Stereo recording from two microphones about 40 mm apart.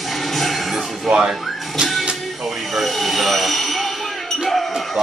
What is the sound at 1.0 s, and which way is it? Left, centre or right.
Speech, right.